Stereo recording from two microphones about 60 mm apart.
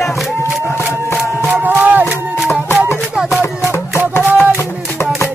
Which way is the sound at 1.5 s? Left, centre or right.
Right.